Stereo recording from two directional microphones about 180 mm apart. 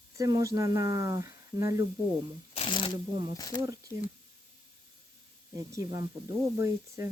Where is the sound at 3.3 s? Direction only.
20° left (ahead or behind).